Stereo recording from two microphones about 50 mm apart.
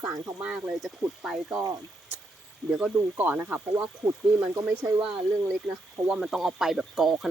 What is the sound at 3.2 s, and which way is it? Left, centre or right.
Speech, right.